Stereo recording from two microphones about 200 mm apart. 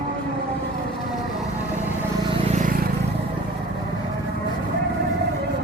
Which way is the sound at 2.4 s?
40° right (ahead or behind).